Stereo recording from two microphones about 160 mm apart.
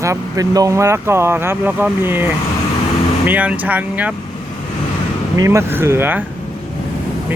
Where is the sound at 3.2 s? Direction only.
10° right (ahead or behind).